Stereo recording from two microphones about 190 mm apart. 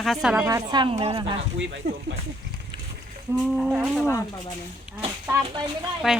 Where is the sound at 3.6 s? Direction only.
Centre (ahead or behind).